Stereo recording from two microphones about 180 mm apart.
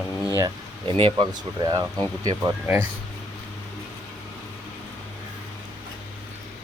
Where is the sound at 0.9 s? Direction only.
30° right (ahead or behind).